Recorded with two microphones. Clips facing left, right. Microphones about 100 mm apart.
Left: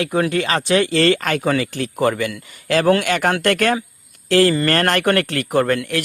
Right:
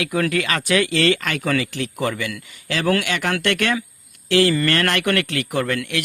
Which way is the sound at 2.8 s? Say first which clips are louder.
Left 3 dB; 30° left (ahead or behind).